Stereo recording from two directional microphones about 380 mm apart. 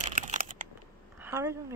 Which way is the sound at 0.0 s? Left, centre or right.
Centre.